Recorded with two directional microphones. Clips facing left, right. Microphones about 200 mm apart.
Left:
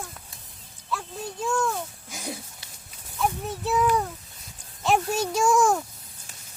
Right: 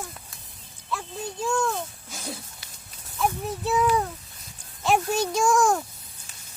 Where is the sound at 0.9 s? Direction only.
Centre (ahead or behind).